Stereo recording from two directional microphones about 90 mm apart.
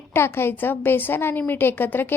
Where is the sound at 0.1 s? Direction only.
25° left (ahead or behind).